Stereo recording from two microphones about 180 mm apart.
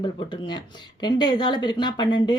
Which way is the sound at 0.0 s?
25° left (ahead or behind).